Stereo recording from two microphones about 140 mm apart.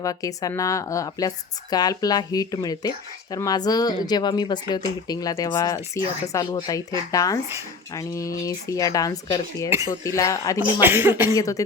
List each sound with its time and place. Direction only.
0.0 s speech: 25° left (ahead or behind)
9.6 s speech: 20° right (ahead or behind)
9.9 s speech: 20° left (ahead or behind)
10.8 s cough: 15° right (ahead or behind)
11.3 s speech: 25° left (ahead or behind)